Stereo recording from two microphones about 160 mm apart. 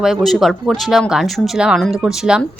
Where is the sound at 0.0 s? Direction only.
Centre (ahead or behind).